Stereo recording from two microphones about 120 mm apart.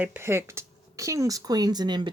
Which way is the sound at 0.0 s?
15° right (ahead or behind).